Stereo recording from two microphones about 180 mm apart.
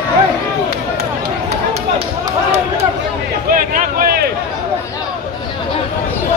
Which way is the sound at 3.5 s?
50° right (ahead or behind).